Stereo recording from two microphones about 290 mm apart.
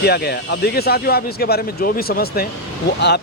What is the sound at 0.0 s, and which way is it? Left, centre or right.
A man's voice, left.